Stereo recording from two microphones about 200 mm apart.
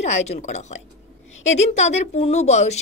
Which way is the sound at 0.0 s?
35° left (ahead or behind).